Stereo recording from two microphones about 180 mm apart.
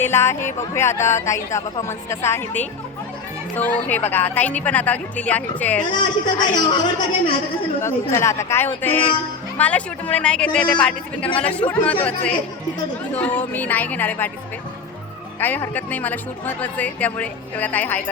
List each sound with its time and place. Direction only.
0.0 s speech: 15° left (ahead or behind)
5.9 s speech: 25° left (ahead or behind)
8.1 s speech: 15° left (ahead or behind)
13.1 s speech: 10° left (ahead or behind)
15.4 s speech: 10° left (ahead or behind)